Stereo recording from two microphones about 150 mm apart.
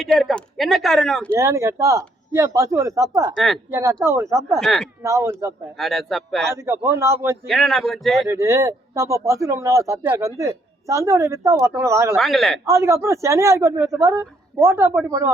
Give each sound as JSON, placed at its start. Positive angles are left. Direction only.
{"t": 0.0, "sound": "speech", "side_deg": 0}
{"t": 1.3, "sound": "speech", "side_deg": -20}
{"t": 3.3, "sound": "speech", "side_deg": 0}
{"t": 3.7, "sound": "speech", "side_deg": -20}
{"t": 4.6, "sound": "speech", "side_deg": 0}
{"t": 5.0, "sound": "speech", "side_deg": -20}
{"t": 5.7, "sound": "speech", "side_deg": 0}
{"t": 6.5, "sound": "a man's voice", "side_deg": -15}
{"t": 7.4, "sound": "speech", "side_deg": 0}
{"t": 8.3, "sound": "speech", "side_deg": -20}
{"t": 12.1, "sound": "speech", "side_deg": 0}
{"t": 12.6, "sound": "speech", "side_deg": -20}